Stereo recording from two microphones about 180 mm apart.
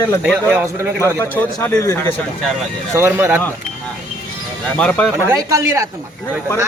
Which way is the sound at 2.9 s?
15° right (ahead or behind).